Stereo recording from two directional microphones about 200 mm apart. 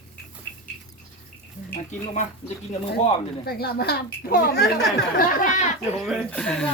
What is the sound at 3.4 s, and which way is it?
A woman's voice, 50° left (ahead or behind).